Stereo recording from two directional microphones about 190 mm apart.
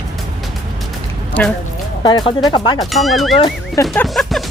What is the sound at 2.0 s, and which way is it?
Speech, 25° left (ahead or behind).